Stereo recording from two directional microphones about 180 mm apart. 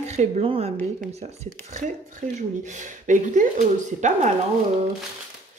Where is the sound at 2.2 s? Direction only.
50° right (ahead or behind).